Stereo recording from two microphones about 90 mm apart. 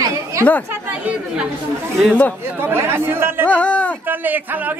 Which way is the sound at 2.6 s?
25° right (ahead or behind).